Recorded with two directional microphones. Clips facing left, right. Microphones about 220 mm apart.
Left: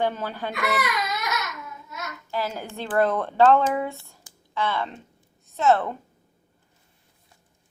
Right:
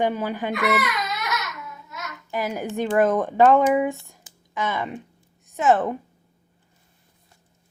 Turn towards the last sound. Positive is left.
turn(degrees=-15)  # may be behind; listen again after turning